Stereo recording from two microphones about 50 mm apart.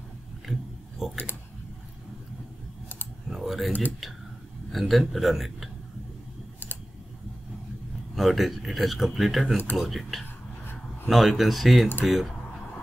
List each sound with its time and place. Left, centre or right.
0.5 s pig: centre
3.3 s typing: centre
4.7 s speech: centre
8.2 s speech: centre